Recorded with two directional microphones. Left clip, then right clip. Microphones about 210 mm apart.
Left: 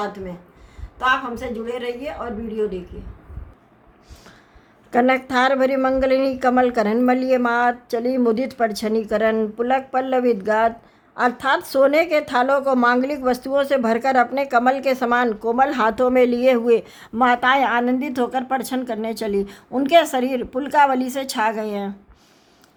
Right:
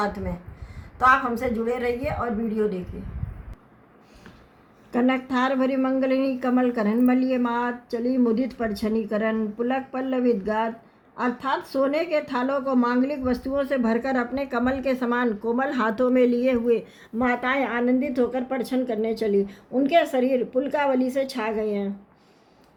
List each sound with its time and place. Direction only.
0.9 s speech: centre (ahead or behind)
4.9 s speech: 35° left (ahead or behind)